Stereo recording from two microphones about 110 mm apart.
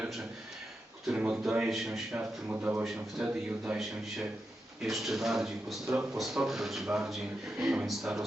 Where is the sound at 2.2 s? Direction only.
15° right (ahead or behind).